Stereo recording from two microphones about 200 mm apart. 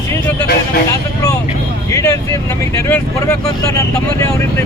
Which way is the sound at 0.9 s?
15° left (ahead or behind).